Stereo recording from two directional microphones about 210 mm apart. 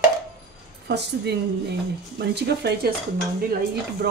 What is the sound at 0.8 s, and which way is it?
Speech, 55° right (ahead or behind).